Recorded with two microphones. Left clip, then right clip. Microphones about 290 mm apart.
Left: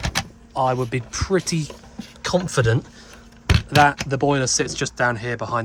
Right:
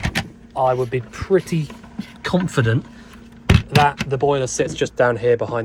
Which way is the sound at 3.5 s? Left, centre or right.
Left.